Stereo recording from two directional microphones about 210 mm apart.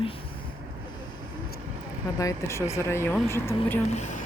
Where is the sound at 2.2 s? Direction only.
15° left (ahead or behind).